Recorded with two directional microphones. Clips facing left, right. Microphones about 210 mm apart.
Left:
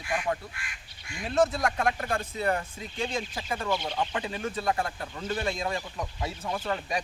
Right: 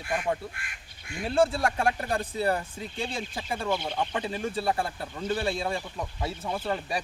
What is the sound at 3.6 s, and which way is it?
Speech, 10° right (ahead or behind).